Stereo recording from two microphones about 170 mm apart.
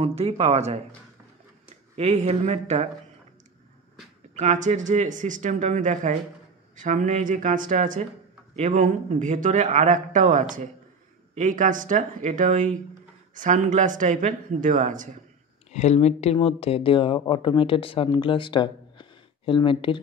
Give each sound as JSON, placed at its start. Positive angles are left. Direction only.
{"t": 0.0, "sound": "speech", "side_deg": -35}
{"t": 2.0, "sound": "speech", "side_deg": -35}
{"t": 4.4, "sound": "a man's voice", "side_deg": -45}
{"t": 15.7, "sound": "speech", "side_deg": 40}